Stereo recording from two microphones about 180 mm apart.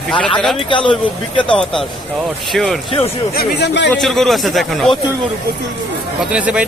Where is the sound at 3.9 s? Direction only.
Centre (ahead or behind).